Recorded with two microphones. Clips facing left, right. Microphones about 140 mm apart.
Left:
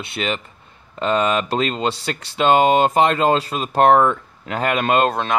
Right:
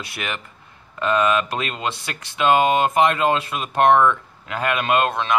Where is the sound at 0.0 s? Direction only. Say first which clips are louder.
Left 5 dB; 25° left (ahead or behind).